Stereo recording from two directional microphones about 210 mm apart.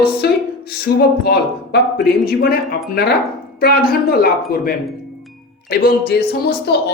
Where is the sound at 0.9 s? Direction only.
50° left (ahead or behind).